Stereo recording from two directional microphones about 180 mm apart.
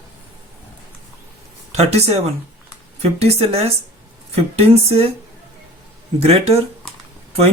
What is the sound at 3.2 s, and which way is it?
Speech, 35° right (ahead or behind).